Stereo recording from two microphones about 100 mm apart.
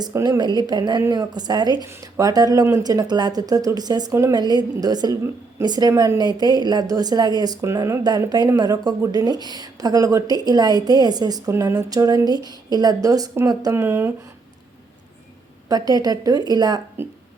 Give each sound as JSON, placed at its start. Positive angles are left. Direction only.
{"t": 0.3, "sound": "a woman's voice", "side_deg": -45}
{"t": 13.7, "sound": "speech", "side_deg": -25}
{"t": 15.7, "sound": "a woman's voice", "side_deg": -40}